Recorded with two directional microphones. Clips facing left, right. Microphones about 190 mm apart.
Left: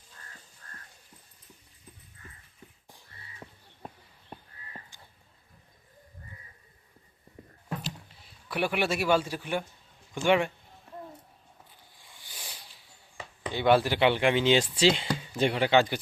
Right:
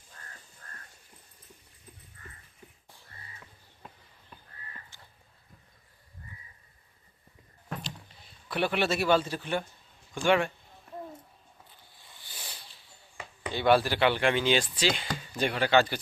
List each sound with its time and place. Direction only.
8.4 s speech: 10° left (ahead or behind)
12.3 s a sound: 10° left (ahead or behind)
13.5 s speech: 20° left (ahead or behind)